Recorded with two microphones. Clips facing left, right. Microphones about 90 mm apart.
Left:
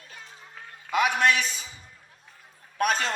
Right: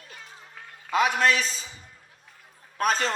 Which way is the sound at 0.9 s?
30° right (ahead or behind).